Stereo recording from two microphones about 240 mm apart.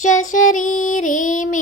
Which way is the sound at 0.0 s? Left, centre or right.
Left.